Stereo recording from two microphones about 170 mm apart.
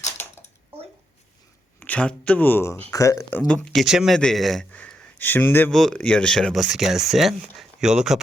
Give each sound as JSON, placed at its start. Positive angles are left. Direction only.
{"t": 1.8, "sound": "a man's voice", "side_deg": 10}